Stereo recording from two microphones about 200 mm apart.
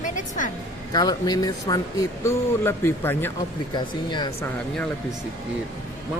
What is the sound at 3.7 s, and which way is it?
Speech, 20° left (ahead or behind).